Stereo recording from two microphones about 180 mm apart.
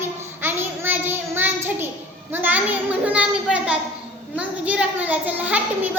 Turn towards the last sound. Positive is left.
turn(degrees=-10)  # may be behind; listen again after turning